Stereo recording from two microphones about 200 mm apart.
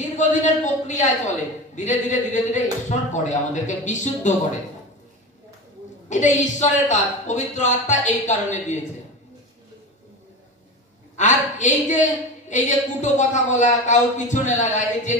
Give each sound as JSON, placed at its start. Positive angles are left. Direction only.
{"t": 0.2, "sound": "a woman's voice", "side_deg": 40}
{"t": 6.0, "sound": "a woman's voice", "side_deg": 35}
{"t": 11.1, "sound": "a woman's voice", "side_deg": 35}